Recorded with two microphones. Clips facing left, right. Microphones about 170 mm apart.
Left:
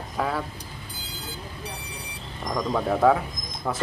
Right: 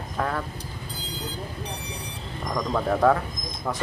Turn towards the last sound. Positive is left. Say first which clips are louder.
# left 1 dB
turn(degrees=5)  # may be behind; listen again after turning